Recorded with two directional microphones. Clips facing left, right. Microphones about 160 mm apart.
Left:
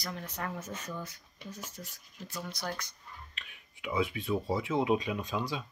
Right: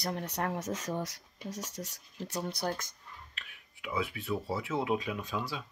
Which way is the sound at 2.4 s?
25° right (ahead or behind).